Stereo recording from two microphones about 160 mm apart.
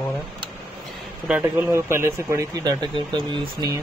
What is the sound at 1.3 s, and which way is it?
Speech, 10° right (ahead or behind).